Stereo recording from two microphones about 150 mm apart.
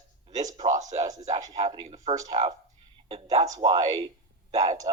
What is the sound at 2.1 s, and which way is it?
Speech, 40° right (ahead or behind).